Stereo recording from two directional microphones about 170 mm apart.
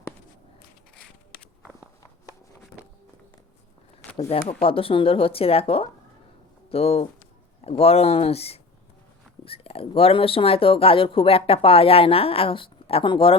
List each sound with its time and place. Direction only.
4.4 s speech: 30° left (ahead or behind)